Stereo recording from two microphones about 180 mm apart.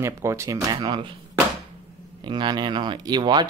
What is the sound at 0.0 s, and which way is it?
Speech, 15° right (ahead or behind).